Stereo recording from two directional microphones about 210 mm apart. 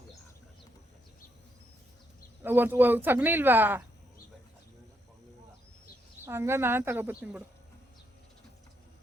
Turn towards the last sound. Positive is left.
turn(degrees=-10)  # may be behind; listen again after turning